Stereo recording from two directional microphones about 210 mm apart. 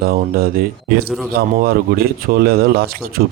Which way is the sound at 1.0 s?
Centre (ahead or behind).